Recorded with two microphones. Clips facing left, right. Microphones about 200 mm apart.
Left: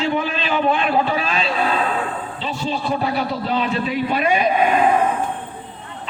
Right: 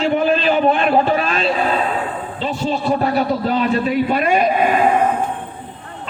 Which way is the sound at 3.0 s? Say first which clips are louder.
Right 5 dB; 50° right (ahead or behind).